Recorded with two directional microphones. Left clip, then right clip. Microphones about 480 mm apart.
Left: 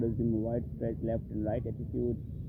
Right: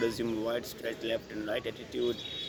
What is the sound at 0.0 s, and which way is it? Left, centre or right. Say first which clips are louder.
Speech: right 2 dB; centre.